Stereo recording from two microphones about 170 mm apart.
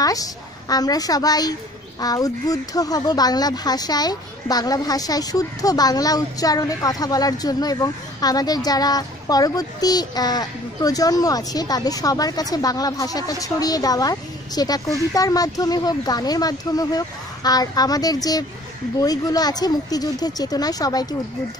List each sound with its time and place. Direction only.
0.0 s speech: 20° left (ahead or behind)